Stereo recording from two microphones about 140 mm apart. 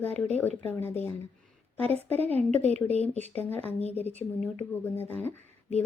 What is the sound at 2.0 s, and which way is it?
Speech, 50° right (ahead or behind).